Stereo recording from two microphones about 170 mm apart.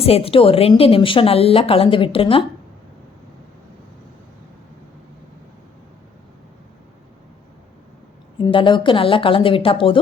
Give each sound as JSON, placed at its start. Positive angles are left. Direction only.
{"t": 0.0, "sound": "a woman's voice", "side_deg": 35}
{"t": 8.4, "sound": "a woman's voice", "side_deg": 30}